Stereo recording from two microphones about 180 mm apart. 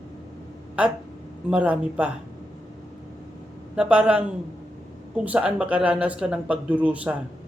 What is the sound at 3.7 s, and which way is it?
Speech, 5° right (ahead or behind).